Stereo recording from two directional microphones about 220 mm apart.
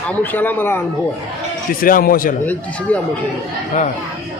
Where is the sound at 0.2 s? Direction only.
10° left (ahead or behind).